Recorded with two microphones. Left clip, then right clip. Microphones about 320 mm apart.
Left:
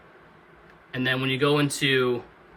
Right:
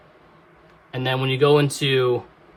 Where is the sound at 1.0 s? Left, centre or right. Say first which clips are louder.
Right 4 dB; centre.